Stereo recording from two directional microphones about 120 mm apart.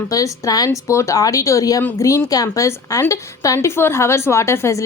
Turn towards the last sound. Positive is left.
turn(degrees=25)  # may be behind; listen again after turning